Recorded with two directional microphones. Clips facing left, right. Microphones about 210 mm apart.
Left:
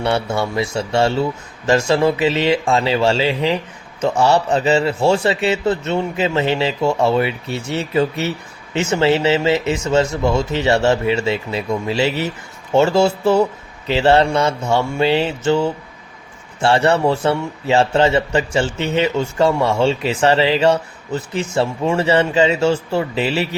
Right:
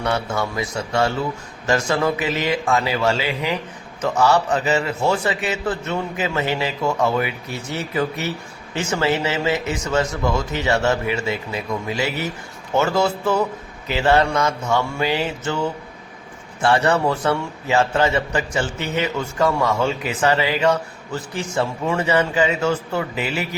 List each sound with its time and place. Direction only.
0.0 s a man's voice: 30° left (ahead or behind)